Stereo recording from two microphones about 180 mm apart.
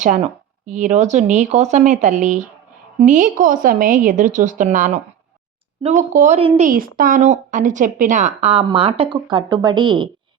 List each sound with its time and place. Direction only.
0.0 s a woman's voice: 45° right (ahead or behind); by 10.1 s 25° right (ahead or behind)